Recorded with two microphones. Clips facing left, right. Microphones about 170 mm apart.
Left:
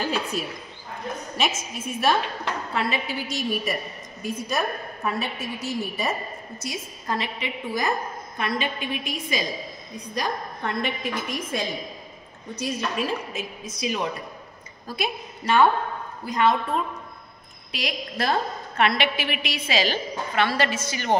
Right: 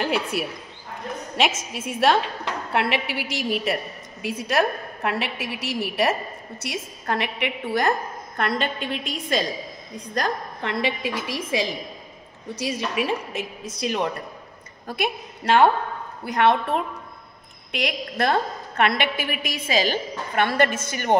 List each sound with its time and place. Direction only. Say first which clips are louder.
0.0 s a woman's voice: right 2 dB; 75° right (ahead or behind)
12.5 s a woman's voice: right 1 dB; 90° right
13.0 s a woman's voice: right 2 dB; 65° right (ahead or behind)